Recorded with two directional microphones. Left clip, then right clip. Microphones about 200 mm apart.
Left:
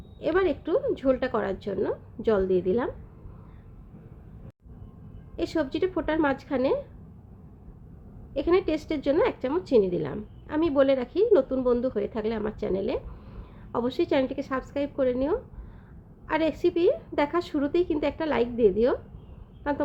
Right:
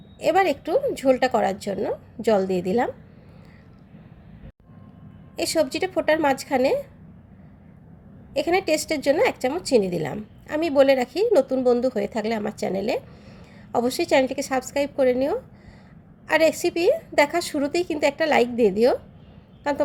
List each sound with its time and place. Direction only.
0.2 s a woman's voice: 10° right (ahead or behind)
5.4 s a woman's voice: 10° right (ahead or behind)
8.3 s a woman's voice: 10° right (ahead or behind)